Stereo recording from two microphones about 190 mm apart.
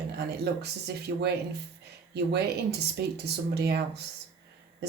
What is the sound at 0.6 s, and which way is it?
Speech, 60° right (ahead or behind).